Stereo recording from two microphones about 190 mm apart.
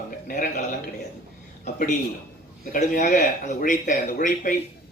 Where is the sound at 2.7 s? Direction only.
40° left (ahead or behind).